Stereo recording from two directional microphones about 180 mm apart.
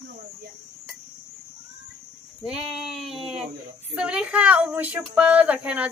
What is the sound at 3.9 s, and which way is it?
Speech, 5° right (ahead or behind).